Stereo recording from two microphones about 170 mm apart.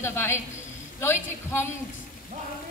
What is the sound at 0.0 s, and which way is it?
A woman's voice, 15° left (ahead or behind).